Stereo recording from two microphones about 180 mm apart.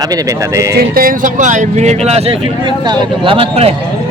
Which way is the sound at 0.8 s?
55° right (ahead or behind).